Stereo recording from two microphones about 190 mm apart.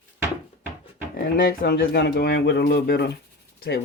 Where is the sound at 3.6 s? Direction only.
60° left (ahead or behind).